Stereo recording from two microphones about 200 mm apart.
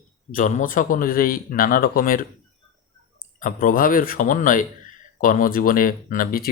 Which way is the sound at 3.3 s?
40° left (ahead or behind).